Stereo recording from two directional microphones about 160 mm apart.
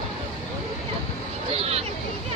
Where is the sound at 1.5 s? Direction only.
35° right (ahead or behind).